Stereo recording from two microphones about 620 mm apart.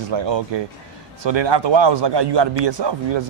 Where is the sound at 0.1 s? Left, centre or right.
Right.